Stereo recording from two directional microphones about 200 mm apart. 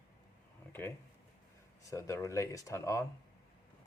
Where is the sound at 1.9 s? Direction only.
15° left (ahead or behind).